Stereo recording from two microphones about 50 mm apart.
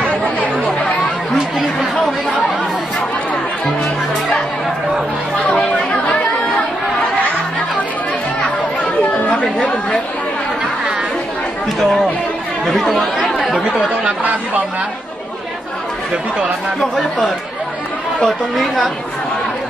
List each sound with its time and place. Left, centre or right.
5.5 s chatter: left
9.0 s chatter: left
9.3 s chatter: centre
12.6 s speech: centre
13.5 s speech: centre
18.2 s speech: centre